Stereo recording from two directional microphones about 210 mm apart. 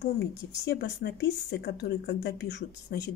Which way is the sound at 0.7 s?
50° left (ahead or behind).